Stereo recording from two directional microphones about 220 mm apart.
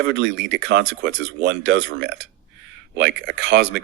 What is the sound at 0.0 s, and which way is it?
A woman's voice, 55° right (ahead or behind).